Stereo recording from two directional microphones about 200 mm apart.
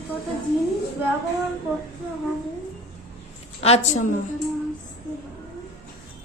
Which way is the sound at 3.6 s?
35° left (ahead or behind).